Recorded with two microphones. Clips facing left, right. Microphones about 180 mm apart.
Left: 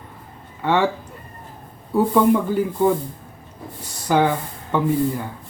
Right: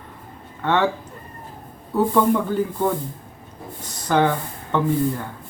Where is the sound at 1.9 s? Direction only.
10° left (ahead or behind).